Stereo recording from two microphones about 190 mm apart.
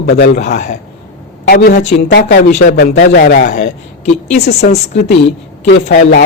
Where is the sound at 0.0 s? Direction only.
55° left (ahead or behind).